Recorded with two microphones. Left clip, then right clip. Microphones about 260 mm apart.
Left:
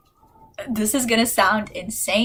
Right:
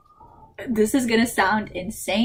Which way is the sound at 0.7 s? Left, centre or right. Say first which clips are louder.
Right 1 dB; left.